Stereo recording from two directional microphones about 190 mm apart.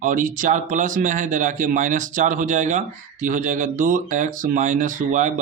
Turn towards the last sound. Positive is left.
turn(degrees=-40)  # may be behind; listen again after turning